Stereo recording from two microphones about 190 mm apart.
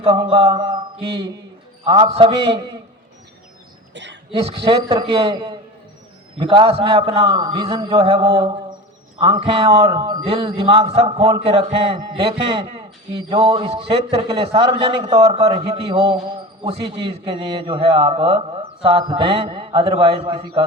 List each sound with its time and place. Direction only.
0.3 s mantra: 30° right (ahead or behind)
1.8 s a man's voice: 30° right (ahead or behind)
3.9 s a sound: 70° right (ahead or behind)
4.3 s a man's voice: 30° right (ahead or behind)